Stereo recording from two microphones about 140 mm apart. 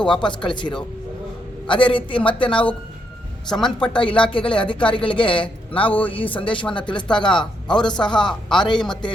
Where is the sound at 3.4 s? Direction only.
5° left (ahead or behind).